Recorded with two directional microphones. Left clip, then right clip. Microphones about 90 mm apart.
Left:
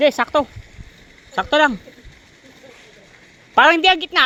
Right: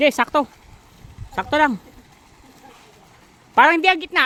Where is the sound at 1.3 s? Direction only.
25° right (ahead or behind).